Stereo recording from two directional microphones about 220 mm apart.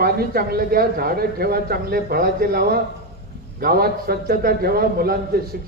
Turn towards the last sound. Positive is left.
turn(degrees=-45)  # may be behind; listen again after turning